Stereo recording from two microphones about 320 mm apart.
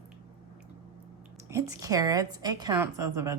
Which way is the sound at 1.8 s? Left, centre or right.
Centre.